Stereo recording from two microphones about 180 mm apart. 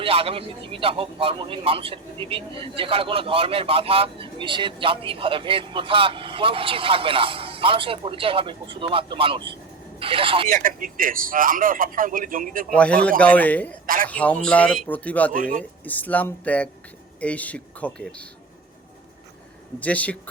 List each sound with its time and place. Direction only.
0.0 s a man's voice: 30° right (ahead or behind)
10.5 s a man's voice: 50° right (ahead or behind)
12.7 s speech: 5° left (ahead or behind)
13.8 s a man's voice: 50° right (ahead or behind)
14.1 s speech: 10° left (ahead or behind)
15.3 s a man's voice: 50° right (ahead or behind)
15.8 s speech: 10° left (ahead or behind)
19.8 s speech: 10° left (ahead or behind)